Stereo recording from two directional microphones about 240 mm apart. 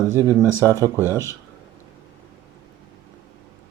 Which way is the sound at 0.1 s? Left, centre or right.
Centre.